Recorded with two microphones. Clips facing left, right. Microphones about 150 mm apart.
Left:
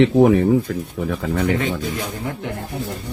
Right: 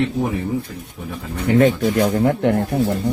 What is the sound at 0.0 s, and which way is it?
Speech, 90° left.